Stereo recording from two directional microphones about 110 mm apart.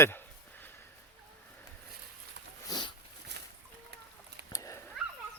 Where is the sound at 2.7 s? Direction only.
45° left (ahead or behind).